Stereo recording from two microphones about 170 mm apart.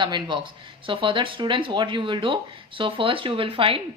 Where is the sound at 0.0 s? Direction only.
25° right (ahead or behind).